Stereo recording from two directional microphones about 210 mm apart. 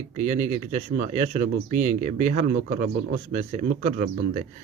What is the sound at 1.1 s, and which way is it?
Speech, 35° right (ahead or behind).